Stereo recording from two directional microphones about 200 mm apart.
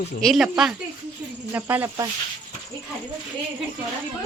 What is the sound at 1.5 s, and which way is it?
Cricket, 10° right (ahead or behind).